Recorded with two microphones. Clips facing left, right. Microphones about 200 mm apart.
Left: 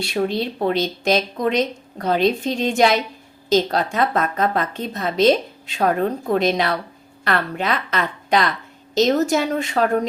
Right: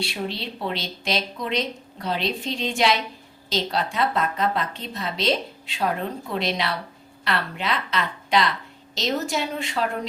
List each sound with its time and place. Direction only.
0.0 s a woman's voice: 45° left (ahead or behind)